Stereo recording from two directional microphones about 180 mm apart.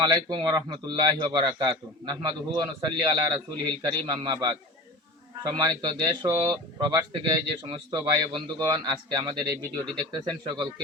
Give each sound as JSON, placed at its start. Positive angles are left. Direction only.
{"t": 0.0, "sound": "speech", "side_deg": -25}